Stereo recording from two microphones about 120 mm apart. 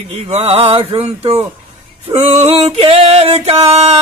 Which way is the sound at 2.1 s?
60° right (ahead or behind).